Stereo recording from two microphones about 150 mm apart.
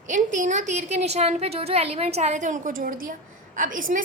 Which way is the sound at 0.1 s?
55° right (ahead or behind).